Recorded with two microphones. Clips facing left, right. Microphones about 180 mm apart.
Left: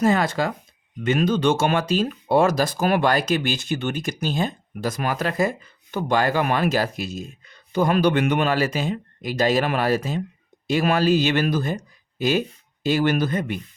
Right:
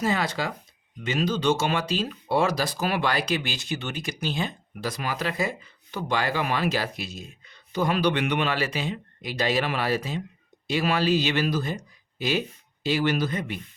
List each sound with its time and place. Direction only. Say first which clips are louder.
0.0 s speech: left 6 dB; 50° left (ahead or behind)
12.8 s speech: left 4 dB; 50° left (ahead or behind)